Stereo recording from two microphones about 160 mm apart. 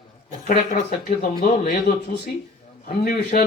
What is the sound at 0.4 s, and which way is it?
A man's voice, 55° left (ahead or behind).